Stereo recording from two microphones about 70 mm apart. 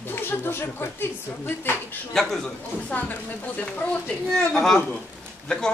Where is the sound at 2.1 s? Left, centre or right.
Centre.